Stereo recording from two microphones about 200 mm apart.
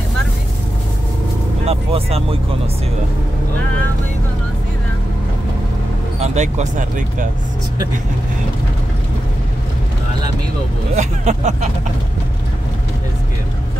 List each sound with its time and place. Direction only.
1.7 s speech: 30° right (ahead or behind)
6.2 s speech: 35° right (ahead or behind)
11.0 s speech: 35° right (ahead or behind)